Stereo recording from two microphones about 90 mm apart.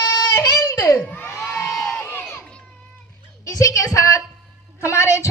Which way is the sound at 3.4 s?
40° left (ahead or behind).